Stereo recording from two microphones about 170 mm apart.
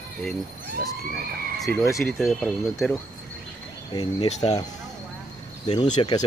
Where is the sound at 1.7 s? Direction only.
10° left (ahead or behind).